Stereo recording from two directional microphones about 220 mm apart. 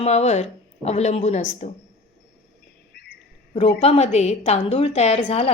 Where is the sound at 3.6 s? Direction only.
25° left (ahead or behind).